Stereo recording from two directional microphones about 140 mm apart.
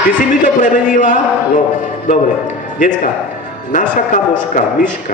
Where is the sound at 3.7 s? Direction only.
65° left (ahead or behind).